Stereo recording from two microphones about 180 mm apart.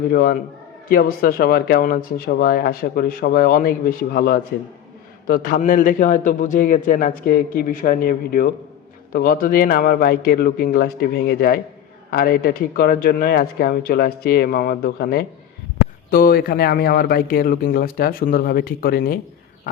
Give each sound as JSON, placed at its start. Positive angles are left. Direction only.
{"t": 0.1, "sound": "a man's voice", "side_deg": 55}